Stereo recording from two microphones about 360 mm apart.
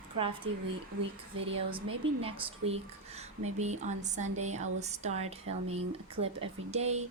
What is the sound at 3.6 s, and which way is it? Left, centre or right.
Speech, centre.